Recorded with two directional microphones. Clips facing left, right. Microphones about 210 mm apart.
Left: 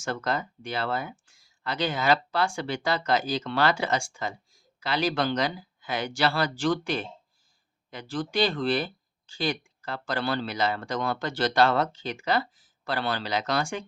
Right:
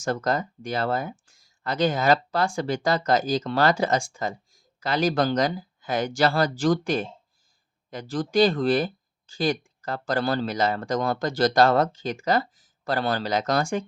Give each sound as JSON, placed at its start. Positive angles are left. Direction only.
{"t": 0.0, "sound": "speech", "side_deg": -40}